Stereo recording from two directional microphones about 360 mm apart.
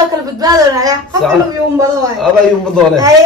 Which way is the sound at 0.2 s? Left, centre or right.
Centre.